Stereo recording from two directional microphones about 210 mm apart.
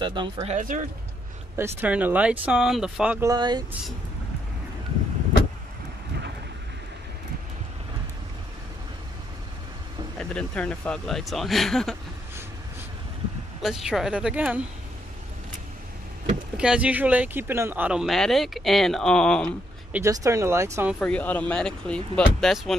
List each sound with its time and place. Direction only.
0.0 s speech: 20° right (ahead or behind)
1.6 s speech: 10° right (ahead or behind)
10.1 s speech: 5° left (ahead or behind)
13.6 s speech: centre (ahead or behind)
16.5 s speech: 5° right (ahead or behind)
19.9 s speech: 15° right (ahead or behind)
21.0 s speech: 5° left (ahead or behind)